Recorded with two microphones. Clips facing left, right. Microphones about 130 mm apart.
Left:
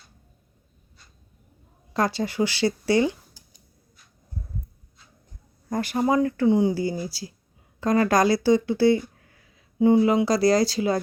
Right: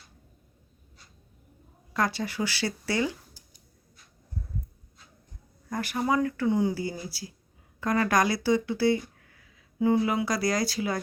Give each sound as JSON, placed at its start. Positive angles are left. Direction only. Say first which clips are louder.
{"t": 1.9, "sound": "speech", "louder": "left 4 dB", "side_deg": 30}
{"t": 5.6, "sound": "speech", "louder": "left 5 dB", "side_deg": 30}